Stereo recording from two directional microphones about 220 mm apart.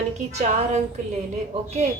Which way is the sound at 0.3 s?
30° right (ahead or behind).